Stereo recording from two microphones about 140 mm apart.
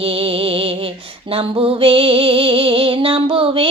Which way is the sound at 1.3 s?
40° right (ahead or behind).